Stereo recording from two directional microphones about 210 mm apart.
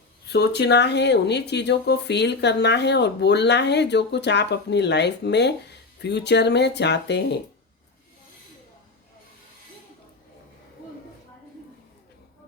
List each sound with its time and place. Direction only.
0.3 s speech: 50° left (ahead or behind)